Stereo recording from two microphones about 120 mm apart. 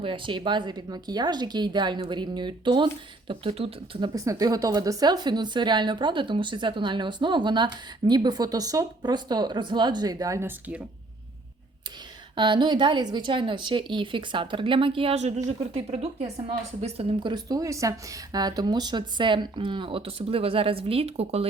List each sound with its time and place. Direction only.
0.0 s a woman's voice: 45° right (ahead or behind)
3.2 s a woman's voice: 50° right (ahead or behind)
4.0 s a woman's voice: 30° right (ahead or behind)
12.4 s a woman's voice: 40° right (ahead or behind)
15.7 s a woman's voice: 60° right (ahead or behind)